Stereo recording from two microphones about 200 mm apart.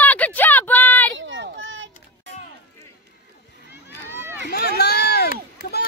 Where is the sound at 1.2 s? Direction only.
65° right (ahead or behind).